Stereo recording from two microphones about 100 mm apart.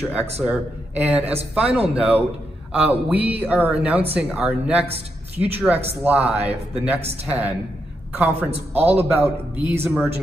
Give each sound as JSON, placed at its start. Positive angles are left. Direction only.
{"t": 0.0, "sound": "speech", "side_deg": -10}